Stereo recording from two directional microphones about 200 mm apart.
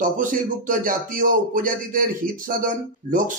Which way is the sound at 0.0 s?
40° right (ahead or behind).